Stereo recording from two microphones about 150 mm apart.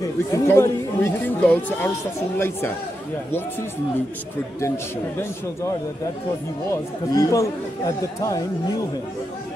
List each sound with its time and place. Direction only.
0.3 s speech: 15° left (ahead or behind)
6.7 s speech: 25° left (ahead or behind)